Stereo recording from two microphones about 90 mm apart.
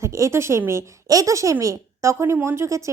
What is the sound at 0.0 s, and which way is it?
A woman's voice, 35° right (ahead or behind).